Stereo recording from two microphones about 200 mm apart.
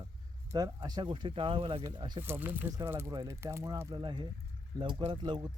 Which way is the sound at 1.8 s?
15° right (ahead or behind).